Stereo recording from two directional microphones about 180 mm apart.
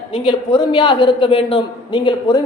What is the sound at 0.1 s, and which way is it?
A man's voice, 30° left (ahead or behind).